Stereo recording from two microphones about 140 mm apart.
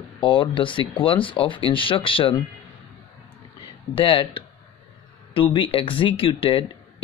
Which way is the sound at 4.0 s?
40° left (ahead or behind).